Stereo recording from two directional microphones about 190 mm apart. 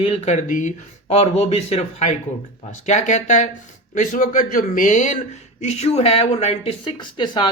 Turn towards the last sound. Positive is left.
turn(degrees=25)  # may be behind; listen again after turning